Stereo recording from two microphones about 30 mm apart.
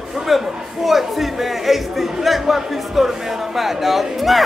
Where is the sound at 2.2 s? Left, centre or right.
Centre.